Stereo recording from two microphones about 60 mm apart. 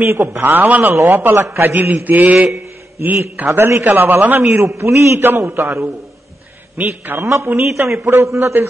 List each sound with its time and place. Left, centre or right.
0.0 s a man's voice: right
0.3 s a man's voice: right
2.0 s mantra: right
2.3 s a sound: right
3.4 s a man's voice: right
3.8 s a man's voice: right
4.6 s a man's voice: right
5.2 s a man's voice: right
6.8 s a man's voice: right
7.7 s a man's voice: right